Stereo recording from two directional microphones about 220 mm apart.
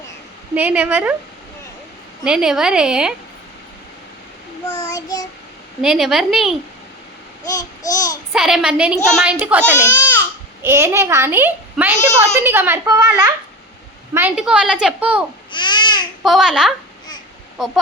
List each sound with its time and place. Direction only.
0.5 s a child's voice: 5° right (ahead or behind)
2.2 s a woman's voice: 5° right (ahead or behind)
4.9 s child singing: 15° left (ahead or behind)
5.8 s a woman's voice: centre (ahead or behind)
7.4 s babbling: 15° left (ahead or behind)
8.3 s a woman's voice: centre (ahead or behind)
15.5 s babbling: 20° left (ahead or behind)
16.2 s a woman's voice: centre (ahead or behind)